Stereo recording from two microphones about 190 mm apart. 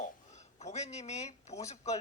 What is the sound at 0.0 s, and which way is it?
Speech, 35° left (ahead or behind).